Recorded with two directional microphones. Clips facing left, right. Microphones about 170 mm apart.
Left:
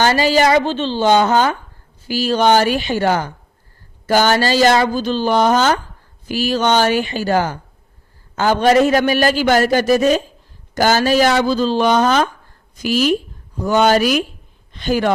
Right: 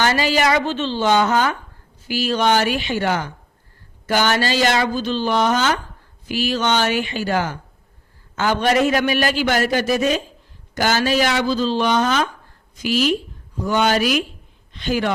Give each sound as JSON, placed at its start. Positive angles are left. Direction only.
{"t": 0.0, "sound": "a man's voice", "side_deg": 35}